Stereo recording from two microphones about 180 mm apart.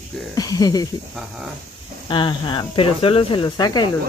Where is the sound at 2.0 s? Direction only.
25° left (ahead or behind).